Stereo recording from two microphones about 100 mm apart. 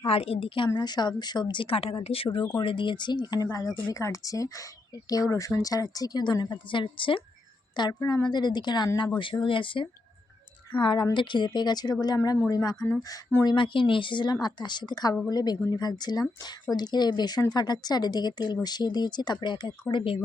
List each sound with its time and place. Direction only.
0.0 s a woman's voice: 70° left (ahead or behind)
2.6 s speech: 55° left (ahead or behind)
7.8 s a woman's voice: 45° left (ahead or behind)
13.4 s a woman's voice: 50° left (ahead or behind)